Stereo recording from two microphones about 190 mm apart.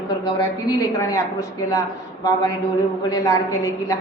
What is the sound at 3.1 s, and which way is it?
Speech, 20° left (ahead or behind).